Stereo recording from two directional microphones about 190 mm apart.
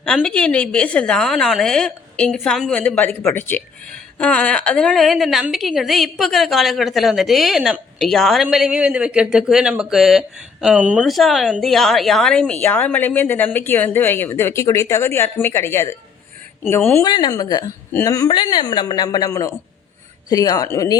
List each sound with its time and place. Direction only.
0.0 s a woman's voice: 5° left (ahead or behind)